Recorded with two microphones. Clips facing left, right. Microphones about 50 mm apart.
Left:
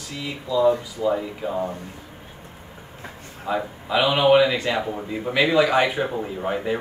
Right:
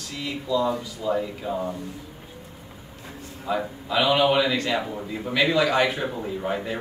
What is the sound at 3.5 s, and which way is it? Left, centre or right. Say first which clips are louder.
Speech: left 2 dB; centre.